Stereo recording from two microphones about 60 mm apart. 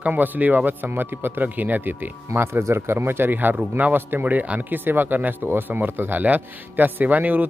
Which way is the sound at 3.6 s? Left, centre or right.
Right.